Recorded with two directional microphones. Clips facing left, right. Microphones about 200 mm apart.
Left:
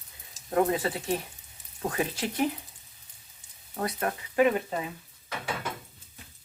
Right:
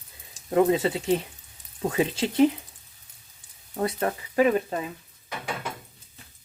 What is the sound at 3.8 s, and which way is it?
Speech, 30° right (ahead or behind).